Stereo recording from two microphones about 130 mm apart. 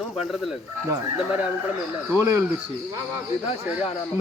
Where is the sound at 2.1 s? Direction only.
20° right (ahead or behind).